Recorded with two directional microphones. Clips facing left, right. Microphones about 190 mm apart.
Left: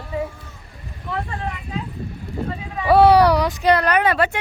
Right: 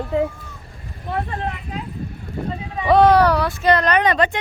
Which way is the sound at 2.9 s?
10° left (ahead or behind).